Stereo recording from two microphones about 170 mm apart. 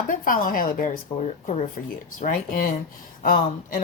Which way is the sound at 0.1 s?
55° left (ahead or behind).